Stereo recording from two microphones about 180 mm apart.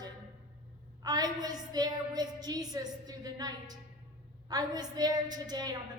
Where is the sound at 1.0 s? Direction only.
20° right (ahead or behind).